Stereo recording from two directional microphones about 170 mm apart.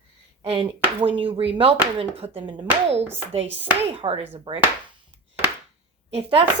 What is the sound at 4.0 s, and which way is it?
Speech, 35° right (ahead or behind).